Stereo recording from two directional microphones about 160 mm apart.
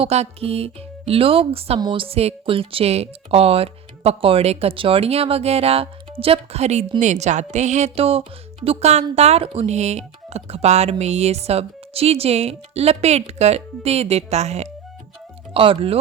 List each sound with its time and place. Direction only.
0.0 s speech: 40° right (ahead or behind)